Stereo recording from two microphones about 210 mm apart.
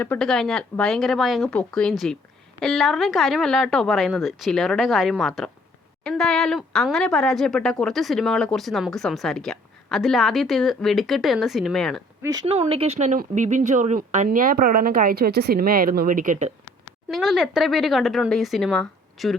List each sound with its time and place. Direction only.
0.0 s speech: 5° left (ahead or behind)
12.2 s speech: 15° right (ahead or behind)
12.5 s speech: 30° right (ahead or behind)
17.1 s speech: centre (ahead or behind)